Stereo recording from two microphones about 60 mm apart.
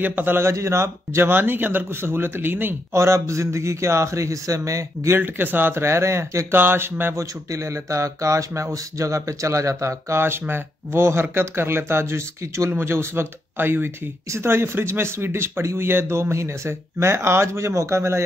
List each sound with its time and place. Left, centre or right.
0.0 s speech: right
0.5 s speech: right
1.3 s speech: right
2.9 s speech: right
5.2 s speech: right
6.5 s speech: right
7.5 s speech: right